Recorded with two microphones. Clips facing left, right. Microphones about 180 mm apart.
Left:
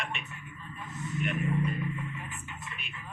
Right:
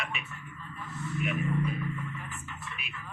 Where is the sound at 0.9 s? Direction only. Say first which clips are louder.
Right 1 dB; 20° left (ahead or behind).